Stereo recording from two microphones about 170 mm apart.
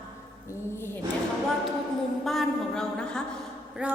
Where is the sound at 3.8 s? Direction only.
5° right (ahead or behind).